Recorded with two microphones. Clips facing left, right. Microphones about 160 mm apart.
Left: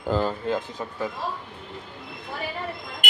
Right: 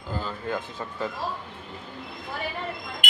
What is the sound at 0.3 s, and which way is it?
Speech, 25° left (ahead or behind).